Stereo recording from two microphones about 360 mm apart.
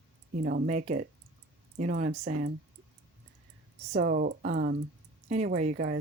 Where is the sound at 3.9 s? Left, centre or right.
Right.